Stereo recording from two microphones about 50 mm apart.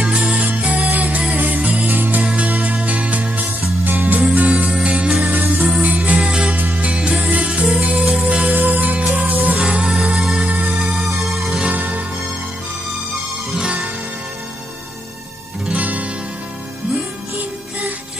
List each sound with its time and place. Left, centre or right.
0.0 s music: right
4.6 s music: right
10.1 s music: centre
10.4 s ringtone: right
11.2 s music: centre
11.7 s music: right
13.6 s music: centre
15.7 s music: right